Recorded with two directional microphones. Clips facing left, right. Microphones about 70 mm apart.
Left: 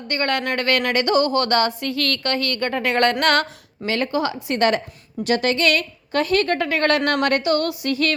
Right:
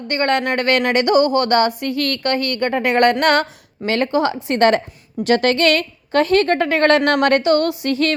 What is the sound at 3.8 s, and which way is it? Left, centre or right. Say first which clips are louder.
A woman's voice: right 4 dB; right.